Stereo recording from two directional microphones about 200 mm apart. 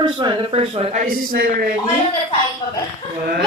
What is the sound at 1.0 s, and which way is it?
Speech, 45° right (ahead or behind).